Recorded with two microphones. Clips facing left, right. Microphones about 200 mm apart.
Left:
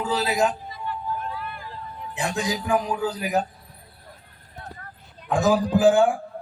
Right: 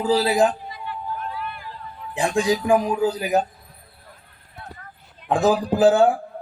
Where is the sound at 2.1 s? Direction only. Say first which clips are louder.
Right 6 dB; 30° right (ahead or behind).